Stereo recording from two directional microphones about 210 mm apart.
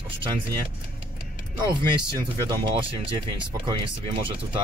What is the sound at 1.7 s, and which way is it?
Speech, 20° right (ahead or behind).